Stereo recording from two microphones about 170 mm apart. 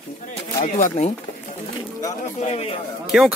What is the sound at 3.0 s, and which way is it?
Speech, centre (ahead or behind).